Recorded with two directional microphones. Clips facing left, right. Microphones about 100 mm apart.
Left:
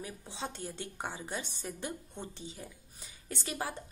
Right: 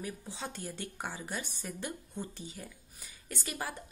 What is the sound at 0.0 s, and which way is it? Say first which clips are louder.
A woman's voice: even; 25° left (ahead or behind).